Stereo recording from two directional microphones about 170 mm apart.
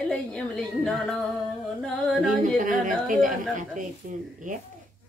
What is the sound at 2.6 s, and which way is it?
Speech, 50° right (ahead or behind).